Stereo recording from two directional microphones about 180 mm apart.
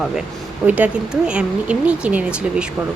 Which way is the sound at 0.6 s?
10° right (ahead or behind).